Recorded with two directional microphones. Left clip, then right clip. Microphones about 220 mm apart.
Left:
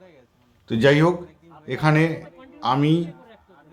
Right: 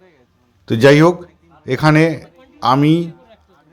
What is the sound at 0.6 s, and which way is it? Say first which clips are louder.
A man's voice: right 8 dB; 30° right (ahead or behind).